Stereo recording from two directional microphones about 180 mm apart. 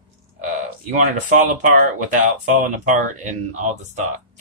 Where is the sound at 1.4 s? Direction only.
45° right (ahead or behind).